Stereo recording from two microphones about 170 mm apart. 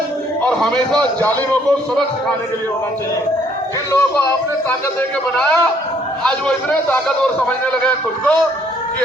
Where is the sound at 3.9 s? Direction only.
20° left (ahead or behind).